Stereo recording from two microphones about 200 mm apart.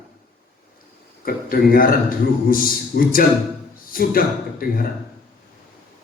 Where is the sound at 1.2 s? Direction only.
45° left (ahead or behind).